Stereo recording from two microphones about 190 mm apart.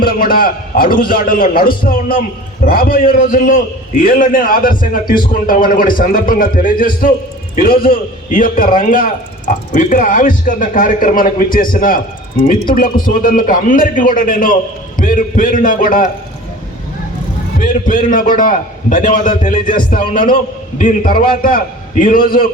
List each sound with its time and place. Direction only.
0.0 s a man's voice: 50° left (ahead or behind)
17.6 s a man's voice: 45° left (ahead or behind)